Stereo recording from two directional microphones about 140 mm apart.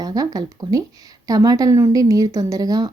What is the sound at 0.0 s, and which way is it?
A woman's voice, 25° right (ahead or behind).